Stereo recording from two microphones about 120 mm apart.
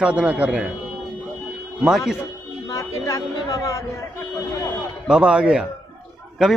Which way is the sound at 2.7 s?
25° left (ahead or behind).